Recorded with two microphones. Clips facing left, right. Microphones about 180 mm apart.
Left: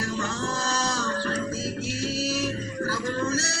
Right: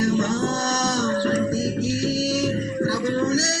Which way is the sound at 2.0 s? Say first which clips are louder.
Right 3 dB; 40° right (ahead or behind).